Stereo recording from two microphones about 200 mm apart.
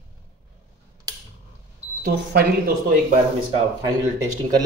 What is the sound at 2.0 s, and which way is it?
Speech, 50° right (ahead or behind).